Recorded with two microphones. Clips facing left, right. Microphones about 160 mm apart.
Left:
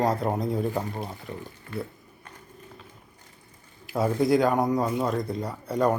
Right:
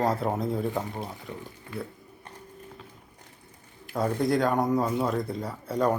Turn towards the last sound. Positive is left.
turn(degrees=0)  # may be behind; listen again after turning